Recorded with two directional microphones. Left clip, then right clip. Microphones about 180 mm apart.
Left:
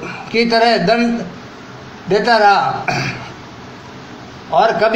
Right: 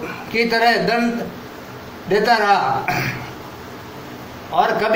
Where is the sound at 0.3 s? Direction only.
30° left (ahead or behind).